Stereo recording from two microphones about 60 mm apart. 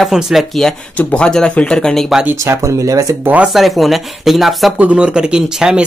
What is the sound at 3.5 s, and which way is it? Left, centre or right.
Speech, centre.